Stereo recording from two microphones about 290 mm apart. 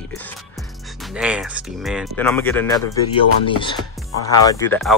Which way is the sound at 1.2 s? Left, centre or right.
Centre.